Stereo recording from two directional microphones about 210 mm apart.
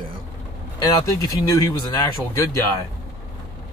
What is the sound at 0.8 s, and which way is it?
Speech, 15° left (ahead or behind).